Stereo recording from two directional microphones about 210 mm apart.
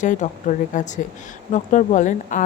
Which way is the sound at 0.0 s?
35° left (ahead or behind).